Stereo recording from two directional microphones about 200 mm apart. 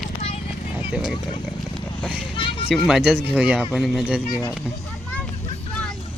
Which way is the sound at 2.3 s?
25° left (ahead or behind).